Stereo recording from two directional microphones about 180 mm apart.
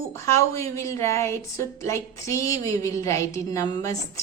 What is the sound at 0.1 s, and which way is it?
A woman's voice, 15° left (ahead or behind).